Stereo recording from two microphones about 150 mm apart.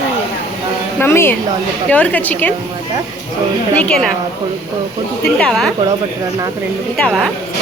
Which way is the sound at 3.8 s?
5° left (ahead or behind).